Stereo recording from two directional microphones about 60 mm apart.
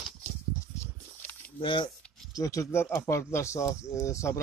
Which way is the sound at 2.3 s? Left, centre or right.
Left.